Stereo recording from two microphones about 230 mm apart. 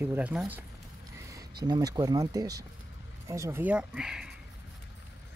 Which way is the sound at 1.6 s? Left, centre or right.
Centre.